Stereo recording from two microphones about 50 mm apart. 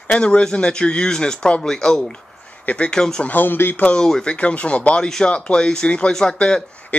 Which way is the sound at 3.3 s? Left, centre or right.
Left.